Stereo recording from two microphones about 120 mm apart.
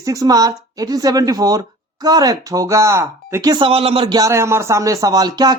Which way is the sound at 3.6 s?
50° right (ahead or behind).